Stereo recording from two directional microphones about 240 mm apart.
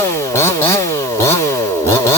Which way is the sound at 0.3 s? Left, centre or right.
Centre.